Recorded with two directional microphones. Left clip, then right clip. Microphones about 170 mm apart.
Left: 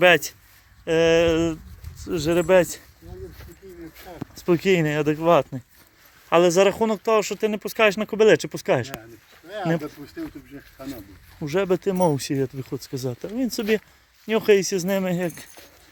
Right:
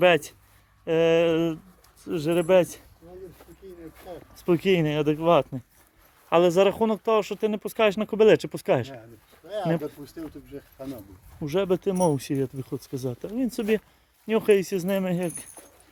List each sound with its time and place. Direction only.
0.0 s speech: centre (ahead or behind)
4.4 s speech: 10° left (ahead or behind)
11.3 s speech: 15° left (ahead or behind)